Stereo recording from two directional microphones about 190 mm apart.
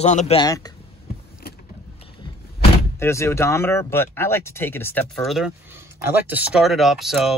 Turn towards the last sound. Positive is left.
turn(degrees=0)  # may be behind; listen again after turning